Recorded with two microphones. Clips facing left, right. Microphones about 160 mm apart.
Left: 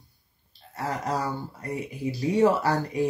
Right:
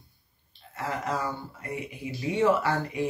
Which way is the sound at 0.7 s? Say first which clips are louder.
Left 2 dB; 40° left (ahead or behind).